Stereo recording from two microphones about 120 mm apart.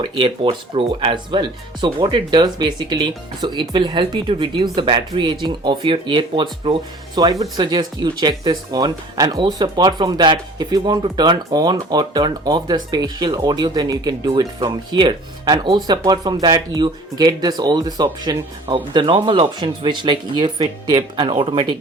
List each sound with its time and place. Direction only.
0.0 s speech: 45° right (ahead or behind)